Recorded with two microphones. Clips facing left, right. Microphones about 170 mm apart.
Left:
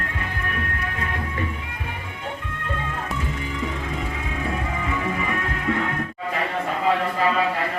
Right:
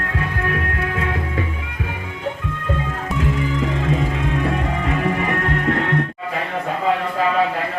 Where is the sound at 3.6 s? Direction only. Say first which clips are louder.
Right 8 dB; 85° right; by 5.9 s 65° right (ahead or behind).